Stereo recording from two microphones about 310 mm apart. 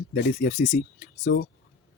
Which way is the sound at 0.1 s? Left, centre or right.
Left.